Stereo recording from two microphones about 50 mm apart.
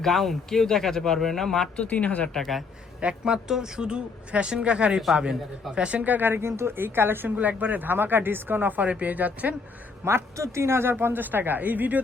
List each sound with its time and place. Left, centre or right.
0.0 s speech: centre
1.7 s speech: left
2.3 s speech: centre
3.0 s a man's voice: centre; by 7.3 s right
7.3 s speech: right
10.0 s speech: right
10.3 s a woman's voice: right